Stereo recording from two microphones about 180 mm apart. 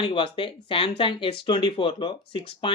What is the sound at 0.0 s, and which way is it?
Speech, 30° left (ahead or behind).